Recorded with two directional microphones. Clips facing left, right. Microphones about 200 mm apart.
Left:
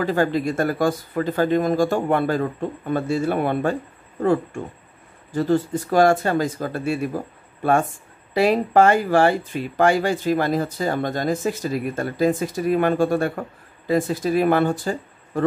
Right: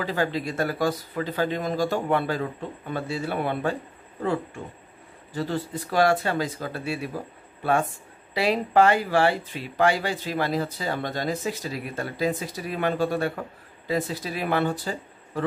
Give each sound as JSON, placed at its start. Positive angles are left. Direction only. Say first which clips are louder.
{"t": 0.0, "sound": "speech", "louder": "left 6 dB", "side_deg": 50}
{"t": 5.3, "sound": "speech", "louder": "left 8 dB", "side_deg": 45}
{"t": 8.4, "sound": "speech", "louder": "left 4 dB", "side_deg": 45}